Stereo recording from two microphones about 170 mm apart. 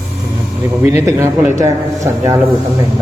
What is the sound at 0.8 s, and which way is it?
Speech, 15° right (ahead or behind).